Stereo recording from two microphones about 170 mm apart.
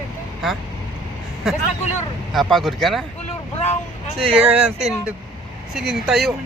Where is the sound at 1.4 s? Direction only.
Centre (ahead or behind).